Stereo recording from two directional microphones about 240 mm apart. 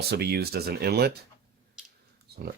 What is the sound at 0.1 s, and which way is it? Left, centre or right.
Speech, right.